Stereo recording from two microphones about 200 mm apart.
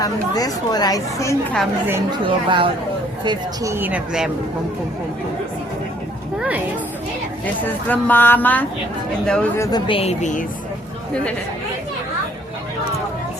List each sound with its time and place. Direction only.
0.0 s speech: 20° left (ahead or behind)
2.1 s a woman's voice: 25° right (ahead or behind); by 4.3 s 5° right (ahead or behind)
7.4 s a woman's voice: 10° left (ahead or behind)
9.7 s a woman's voice: 25° left (ahead or behind)